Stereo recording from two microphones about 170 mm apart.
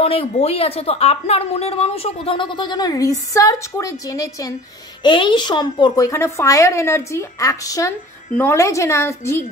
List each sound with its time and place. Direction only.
0.0 s a woman's voice: 35° left (ahead or behind); by 9.4 s 15° left (ahead or behind)